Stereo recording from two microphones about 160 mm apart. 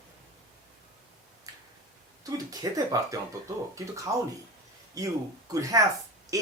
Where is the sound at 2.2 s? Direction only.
20° right (ahead or behind).